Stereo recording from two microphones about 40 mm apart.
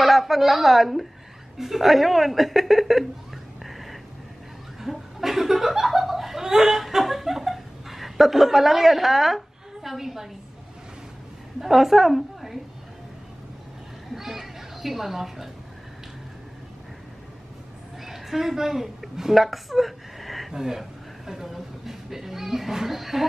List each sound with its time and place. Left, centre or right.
0.0 s a woman's voice: centre
3.6 s a sound: centre
4.8 s speech: centre
11.6 s speech: centre
14.1 s speech: centre
18.0 s a woman's voice: centre
20.5 s speech: centre